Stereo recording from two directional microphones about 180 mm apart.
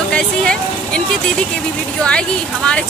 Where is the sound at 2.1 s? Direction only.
5° left (ahead or behind).